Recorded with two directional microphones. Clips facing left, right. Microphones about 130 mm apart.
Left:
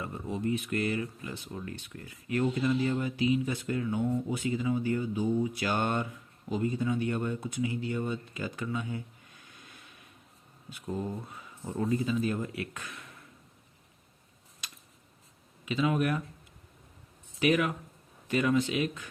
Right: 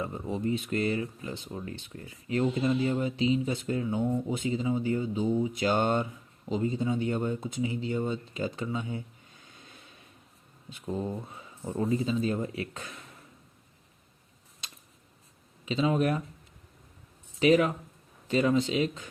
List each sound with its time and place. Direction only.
0.0 s speech: 25° right (ahead or behind)
9.5 s a sound: 25° right (ahead or behind)
11.3 s speech: 25° right (ahead or behind)
14.6 s a sound: 25° right (ahead or behind)
15.6 s speech: 25° right (ahead or behind)
17.4 s speech: 25° right (ahead or behind)